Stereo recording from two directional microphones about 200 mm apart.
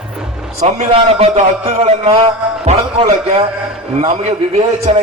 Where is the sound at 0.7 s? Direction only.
30° right (ahead or behind).